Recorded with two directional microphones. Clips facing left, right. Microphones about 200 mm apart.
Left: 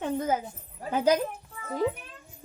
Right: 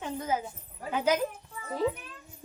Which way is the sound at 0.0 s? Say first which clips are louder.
Left 5 dB; 50° left (ahead or behind).